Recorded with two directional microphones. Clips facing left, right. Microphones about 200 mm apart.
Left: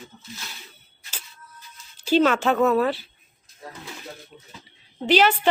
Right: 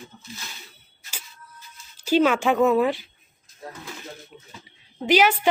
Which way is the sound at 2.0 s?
10° right (ahead or behind).